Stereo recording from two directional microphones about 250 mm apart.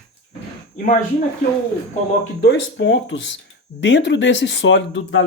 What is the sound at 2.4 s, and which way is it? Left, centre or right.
Speech, left.